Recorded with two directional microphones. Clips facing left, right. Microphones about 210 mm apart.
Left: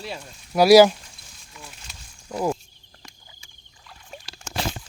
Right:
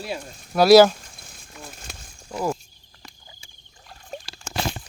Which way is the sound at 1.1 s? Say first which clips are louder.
Right 3 dB; 50° right (ahead or behind).